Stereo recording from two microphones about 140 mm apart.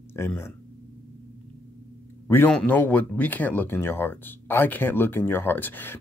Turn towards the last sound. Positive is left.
turn(degrees=15)  # may be behind; listen again after turning